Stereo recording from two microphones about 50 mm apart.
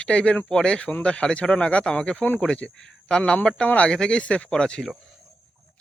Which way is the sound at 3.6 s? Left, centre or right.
Left.